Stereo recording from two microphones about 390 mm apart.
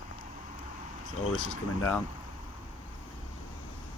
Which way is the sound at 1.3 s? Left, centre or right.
Left.